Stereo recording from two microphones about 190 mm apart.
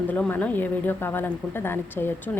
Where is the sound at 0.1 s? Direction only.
10° left (ahead or behind).